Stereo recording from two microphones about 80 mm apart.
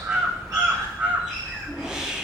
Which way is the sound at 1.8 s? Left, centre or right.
Centre.